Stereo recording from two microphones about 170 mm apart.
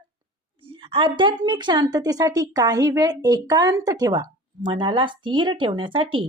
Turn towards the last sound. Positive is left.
turn(degrees=-30)  # may be behind; listen again after turning